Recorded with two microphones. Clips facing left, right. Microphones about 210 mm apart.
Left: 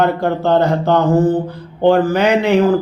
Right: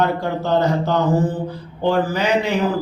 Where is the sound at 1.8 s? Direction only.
60° left (ahead or behind).